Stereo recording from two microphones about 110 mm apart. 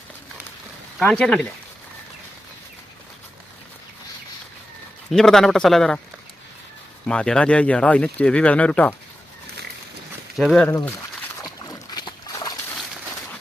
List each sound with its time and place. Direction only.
1.0 s speech: 10° left (ahead or behind)
5.1 s a man's voice: 5° left (ahead or behind)
7.0 s speech: 10° left (ahead or behind)
10.3 s speech: centre (ahead or behind)
10.7 s a sound: 20° left (ahead or behind)
11.6 s boat: 35° left (ahead or behind)